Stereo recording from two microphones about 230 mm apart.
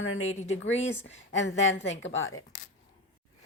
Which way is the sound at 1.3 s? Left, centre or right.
Left.